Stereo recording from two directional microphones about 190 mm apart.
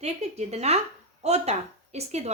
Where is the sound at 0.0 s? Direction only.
35° right (ahead or behind).